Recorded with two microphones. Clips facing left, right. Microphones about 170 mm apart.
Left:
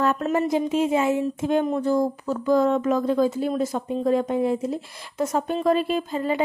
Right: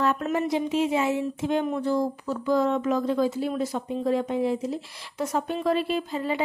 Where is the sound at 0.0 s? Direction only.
40° left (ahead or behind).